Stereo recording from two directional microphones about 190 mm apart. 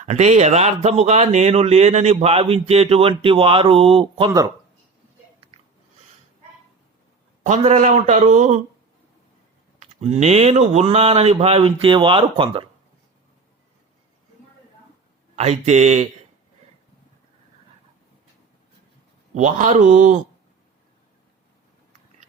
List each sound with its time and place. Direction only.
0.0 s speech: 35° right (ahead or behind)
7.4 s speech: 40° right (ahead or behind)
9.8 s speech: 35° right (ahead or behind)
15.4 s speech: 35° right (ahead or behind)
19.3 s speech: 40° right (ahead or behind)